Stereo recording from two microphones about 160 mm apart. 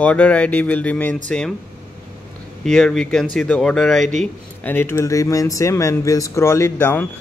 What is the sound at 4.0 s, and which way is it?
Speech, 50° right (ahead or behind).